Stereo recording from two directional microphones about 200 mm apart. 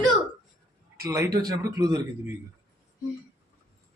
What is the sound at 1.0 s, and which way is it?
A man's voice, 15° right (ahead or behind).